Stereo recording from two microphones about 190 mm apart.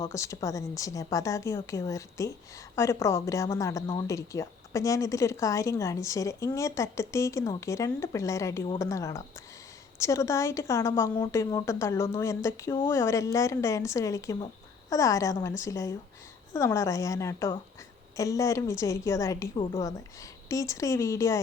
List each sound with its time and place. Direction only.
0.0 s speech: 15° left (ahead or behind)